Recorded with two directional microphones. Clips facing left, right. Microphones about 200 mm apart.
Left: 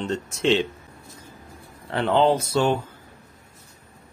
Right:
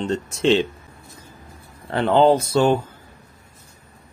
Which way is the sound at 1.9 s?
45° right (ahead or behind).